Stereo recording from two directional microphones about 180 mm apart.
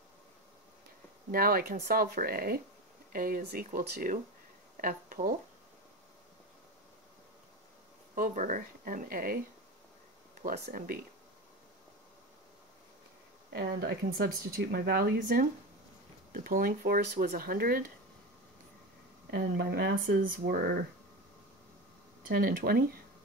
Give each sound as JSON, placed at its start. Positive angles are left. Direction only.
{"t": 1.3, "sound": "speech", "side_deg": -55}
{"t": 8.1, "sound": "speech", "side_deg": -45}
{"t": 10.4, "sound": "speech", "side_deg": -60}
{"t": 13.5, "sound": "speech", "side_deg": -60}
{"t": 19.3, "sound": "speech", "side_deg": -65}
{"t": 22.4, "sound": "speech", "side_deg": -55}